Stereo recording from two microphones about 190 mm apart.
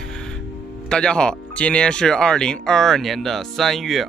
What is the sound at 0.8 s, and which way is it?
Speech, 5° left (ahead or behind).